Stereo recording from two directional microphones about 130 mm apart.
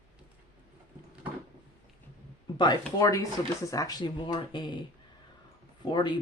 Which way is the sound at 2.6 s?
35° left (ahead or behind).